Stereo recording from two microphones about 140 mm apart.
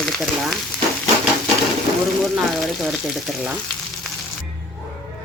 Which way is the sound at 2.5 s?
Centre (ahead or behind).